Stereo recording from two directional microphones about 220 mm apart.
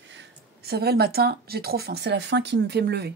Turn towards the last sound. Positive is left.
turn(degrees=-50)  # may be behind; listen again after turning